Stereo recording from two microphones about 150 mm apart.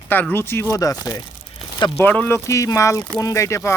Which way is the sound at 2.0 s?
10° left (ahead or behind).